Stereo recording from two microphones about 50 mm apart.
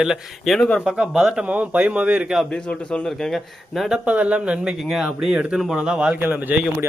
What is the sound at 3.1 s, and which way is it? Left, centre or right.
Speech, centre.